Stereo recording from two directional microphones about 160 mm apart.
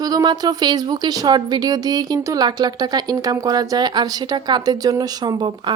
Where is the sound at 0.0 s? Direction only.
25° right (ahead or behind).